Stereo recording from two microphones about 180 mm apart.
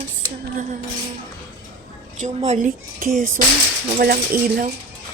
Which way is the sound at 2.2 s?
40° right (ahead or behind).